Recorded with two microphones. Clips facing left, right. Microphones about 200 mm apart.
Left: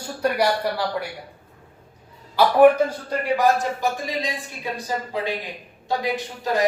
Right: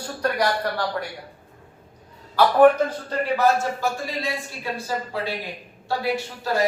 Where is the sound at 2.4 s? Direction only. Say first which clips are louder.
Left 1 dB; 10° left (ahead or behind).